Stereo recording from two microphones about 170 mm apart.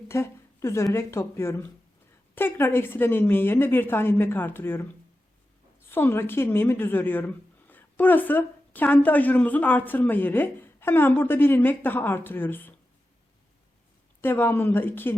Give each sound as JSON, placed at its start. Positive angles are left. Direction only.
{"t": 0.1, "sound": "a sound", "side_deg": 15}
{"t": 0.9, "sound": "a woman's voice", "side_deg": 15}
{"t": 14.2, "sound": "a woman's voice", "side_deg": 10}